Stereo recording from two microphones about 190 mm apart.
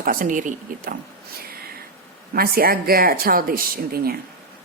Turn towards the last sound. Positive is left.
turn(degrees=-55)  # may be behind; listen again after turning